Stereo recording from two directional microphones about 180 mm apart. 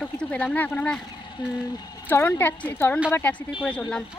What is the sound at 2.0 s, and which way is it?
Speech, 10° left (ahead or behind).